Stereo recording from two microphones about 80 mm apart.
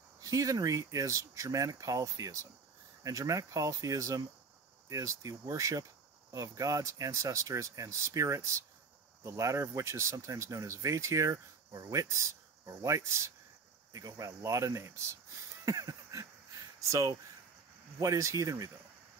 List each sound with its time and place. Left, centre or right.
0.2 s speech: right
15.6 s a sound: right
18.0 s speech: right